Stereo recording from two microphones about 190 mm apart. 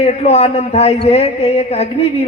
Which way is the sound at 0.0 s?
35° left (ahead or behind).